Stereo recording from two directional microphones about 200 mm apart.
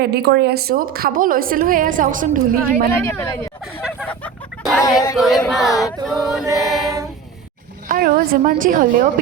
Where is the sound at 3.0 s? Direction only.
15° left (ahead or behind).